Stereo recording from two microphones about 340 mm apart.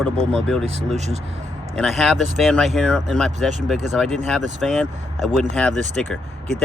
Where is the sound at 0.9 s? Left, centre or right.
Centre.